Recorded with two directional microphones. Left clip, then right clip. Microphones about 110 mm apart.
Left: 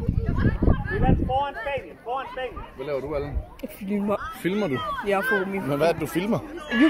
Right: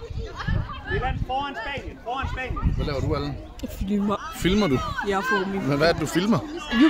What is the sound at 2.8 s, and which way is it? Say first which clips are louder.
Speech: left 1 dB; 60° right (ahead or behind).